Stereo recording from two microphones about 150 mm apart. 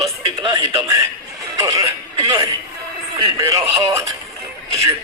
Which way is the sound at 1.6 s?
20° right (ahead or behind).